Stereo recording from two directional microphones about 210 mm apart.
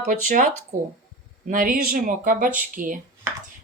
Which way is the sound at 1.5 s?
45° right (ahead or behind).